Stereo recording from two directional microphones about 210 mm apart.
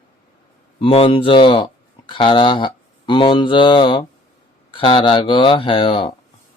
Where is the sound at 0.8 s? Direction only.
25° left (ahead or behind).